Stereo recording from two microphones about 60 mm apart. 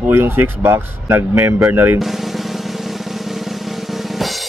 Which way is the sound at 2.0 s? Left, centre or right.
Centre.